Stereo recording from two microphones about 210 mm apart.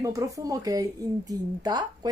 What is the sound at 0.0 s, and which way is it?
Speech, 15° right (ahead or behind).